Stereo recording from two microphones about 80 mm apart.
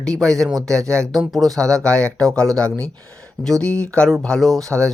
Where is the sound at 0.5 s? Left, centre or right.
Right.